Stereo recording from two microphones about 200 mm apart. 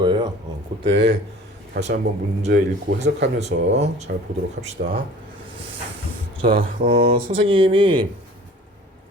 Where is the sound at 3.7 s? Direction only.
35° right (ahead or behind).